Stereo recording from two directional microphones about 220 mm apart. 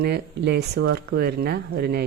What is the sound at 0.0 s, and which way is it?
Speech, 50° right (ahead or behind).